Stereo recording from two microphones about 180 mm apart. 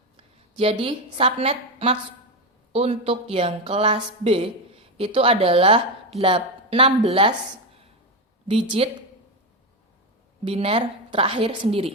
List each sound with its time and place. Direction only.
0.2 s a woman's voice: 30° right (ahead or behind)
8.7 s speech: 25° right (ahead or behind)
10.5 s a woman's voice: 30° right (ahead or behind)